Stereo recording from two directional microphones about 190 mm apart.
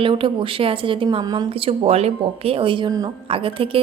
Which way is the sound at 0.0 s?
25° right (ahead or behind).